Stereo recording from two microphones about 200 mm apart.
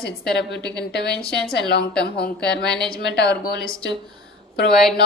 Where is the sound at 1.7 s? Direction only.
55° left (ahead or behind).